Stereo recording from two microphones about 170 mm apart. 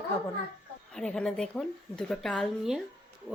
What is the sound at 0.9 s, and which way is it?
Speech, 5° left (ahead or behind).